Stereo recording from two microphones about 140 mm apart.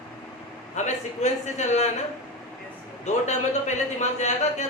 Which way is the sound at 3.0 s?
55° left (ahead or behind).